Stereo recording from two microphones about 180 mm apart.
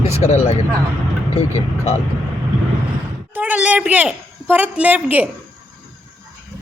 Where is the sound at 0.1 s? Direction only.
40° left (ahead or behind).